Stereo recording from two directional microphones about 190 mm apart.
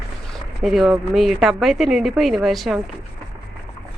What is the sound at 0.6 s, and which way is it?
A woman's voice, centre (ahead or behind).